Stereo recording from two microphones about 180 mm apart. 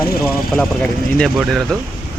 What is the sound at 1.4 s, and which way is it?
Speech, centre (ahead or behind).